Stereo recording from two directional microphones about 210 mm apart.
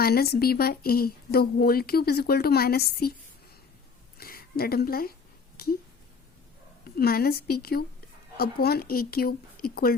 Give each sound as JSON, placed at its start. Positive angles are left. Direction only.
{"t": 0.0, "sound": "speech", "side_deg": 45}
{"t": 4.2, "sound": "a woman's voice", "side_deg": 45}
{"t": 5.6, "sound": "a sound", "side_deg": 45}
{"t": 6.8, "sound": "speech", "side_deg": 45}